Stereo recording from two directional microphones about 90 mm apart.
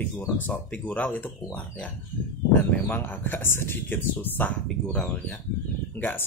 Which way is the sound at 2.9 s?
20° left (ahead or behind).